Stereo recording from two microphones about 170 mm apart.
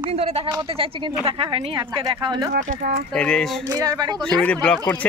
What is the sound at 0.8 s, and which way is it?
A woman's voice, 30° right (ahead or behind).